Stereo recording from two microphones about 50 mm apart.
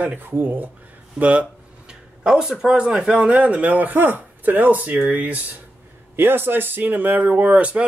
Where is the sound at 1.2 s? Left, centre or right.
Right.